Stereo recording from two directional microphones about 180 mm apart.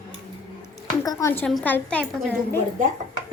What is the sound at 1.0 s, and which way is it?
Speech, 20° left (ahead or behind).